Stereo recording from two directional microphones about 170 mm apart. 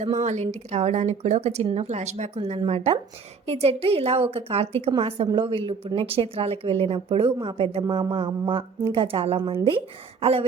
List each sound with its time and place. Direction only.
0.2 s speech: 40° right (ahead or behind)